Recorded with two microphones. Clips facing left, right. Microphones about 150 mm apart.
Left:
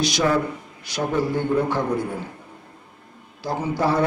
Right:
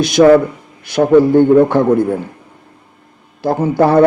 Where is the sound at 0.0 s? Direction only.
60° right (ahead or behind).